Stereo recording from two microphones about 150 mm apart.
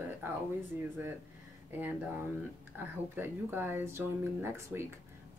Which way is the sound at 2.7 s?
15° right (ahead or behind).